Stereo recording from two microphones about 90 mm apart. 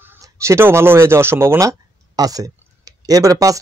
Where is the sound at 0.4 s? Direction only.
30° right (ahead or behind).